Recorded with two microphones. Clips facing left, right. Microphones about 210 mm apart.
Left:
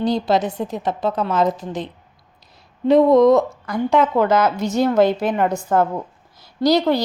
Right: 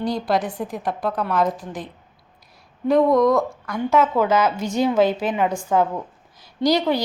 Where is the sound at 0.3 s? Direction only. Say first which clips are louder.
Left 3 dB; 25° left (ahead or behind).